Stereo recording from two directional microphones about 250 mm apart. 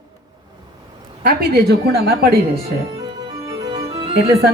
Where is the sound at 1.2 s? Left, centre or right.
Right.